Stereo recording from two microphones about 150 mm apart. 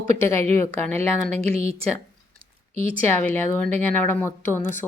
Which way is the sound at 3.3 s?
10° left (ahead or behind).